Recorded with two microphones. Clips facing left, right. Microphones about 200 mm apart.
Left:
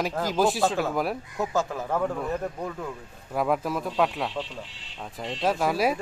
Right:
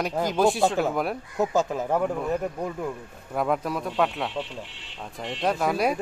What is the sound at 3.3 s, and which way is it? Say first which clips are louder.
Speech: even; centre (ahead or behind).